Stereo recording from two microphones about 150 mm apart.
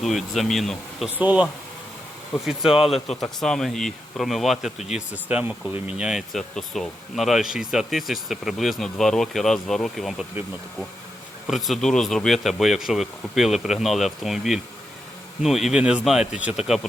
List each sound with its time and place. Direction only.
0.0 s speech: centre (ahead or behind)
1.1 s speech: 10° right (ahead or behind)
11.4 s speech: centre (ahead or behind)